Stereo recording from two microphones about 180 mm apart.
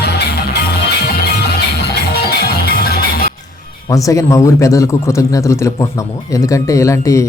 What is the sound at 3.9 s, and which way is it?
A man's voice, 20° left (ahead or behind).